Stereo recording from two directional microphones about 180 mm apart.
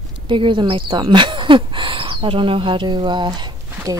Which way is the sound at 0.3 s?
25° right (ahead or behind).